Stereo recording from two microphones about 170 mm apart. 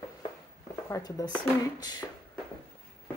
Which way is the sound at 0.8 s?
20° left (ahead or behind).